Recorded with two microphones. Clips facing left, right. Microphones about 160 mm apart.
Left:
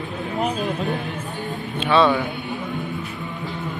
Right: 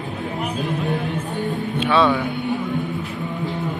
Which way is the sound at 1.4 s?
10° right (ahead or behind).